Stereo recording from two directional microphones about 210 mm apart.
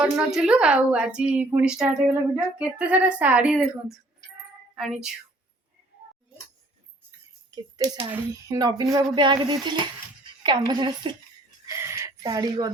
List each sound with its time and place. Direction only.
0.3 s a woman's voice: 5° right (ahead or behind)
7.5 s a woman's voice: 15° right (ahead or behind)
11.6 s a sound: 15° right (ahead or behind)